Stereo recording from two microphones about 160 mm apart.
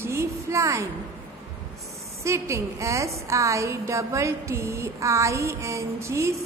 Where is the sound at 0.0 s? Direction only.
15° right (ahead or behind).